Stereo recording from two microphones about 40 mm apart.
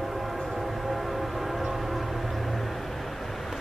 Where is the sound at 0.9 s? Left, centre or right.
Centre.